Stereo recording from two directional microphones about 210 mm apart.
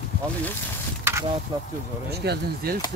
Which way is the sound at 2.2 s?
50° right (ahead or behind).